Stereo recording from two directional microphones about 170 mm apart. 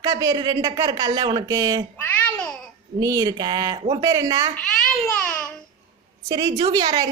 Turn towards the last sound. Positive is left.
turn(degrees=-25)  # may be behind; listen again after turning